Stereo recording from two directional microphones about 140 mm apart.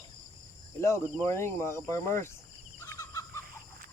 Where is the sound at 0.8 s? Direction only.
20° left (ahead or behind).